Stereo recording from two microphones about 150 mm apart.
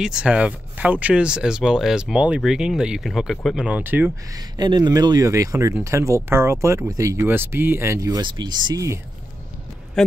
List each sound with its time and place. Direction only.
0.0 s speech: 5° right (ahead or behind)
4.6 s speech: 30° right (ahead or behind)
10.0 s speech: 5° left (ahead or behind)